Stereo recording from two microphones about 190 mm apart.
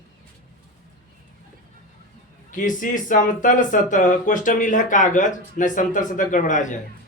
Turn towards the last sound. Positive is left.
turn(degrees=40)  # may be behind; listen again after turning